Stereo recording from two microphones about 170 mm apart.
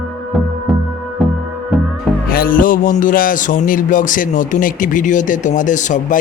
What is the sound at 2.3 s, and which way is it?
Speech, 60° left (ahead or behind).